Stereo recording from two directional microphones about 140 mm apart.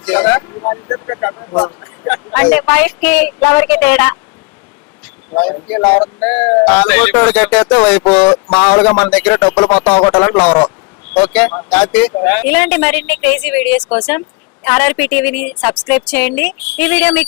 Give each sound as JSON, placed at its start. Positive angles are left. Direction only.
{"t": 0.0, "sound": "a sound", "side_deg": 10}
{"t": 0.6, "sound": "speech", "side_deg": 25}
{"t": 1.8, "sound": "speech", "side_deg": 10}
{"t": 5.4, "sound": "speech", "side_deg": 10}